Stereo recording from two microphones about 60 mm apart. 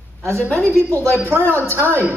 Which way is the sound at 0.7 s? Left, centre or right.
Right.